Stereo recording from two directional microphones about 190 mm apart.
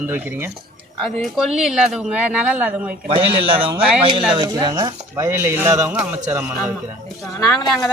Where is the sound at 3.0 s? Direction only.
30° right (ahead or behind); by 6.7 s 10° right (ahead or behind).